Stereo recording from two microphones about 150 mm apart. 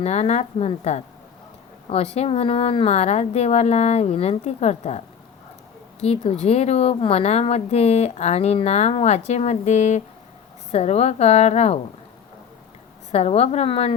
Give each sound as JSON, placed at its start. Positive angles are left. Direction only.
{"t": 0.0, "sound": "speech", "side_deg": 50}
{"t": 13.1, "sound": "speech", "side_deg": 45}